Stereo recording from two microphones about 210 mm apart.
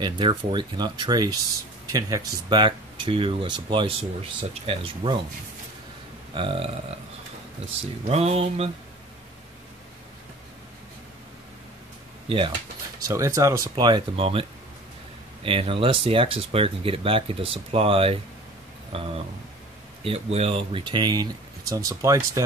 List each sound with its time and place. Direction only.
0.0 s speech: 20° right (ahead or behind)
6.3 s speech: 25° right (ahead or behind)
8.1 s speech: 30° right (ahead or behind)
13.0 s speech: 15° right (ahead or behind)
15.4 s speech: 25° right (ahead or behind)